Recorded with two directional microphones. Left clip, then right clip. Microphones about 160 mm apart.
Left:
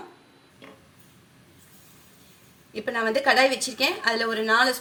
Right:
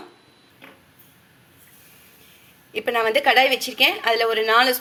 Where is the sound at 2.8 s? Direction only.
10° right (ahead or behind).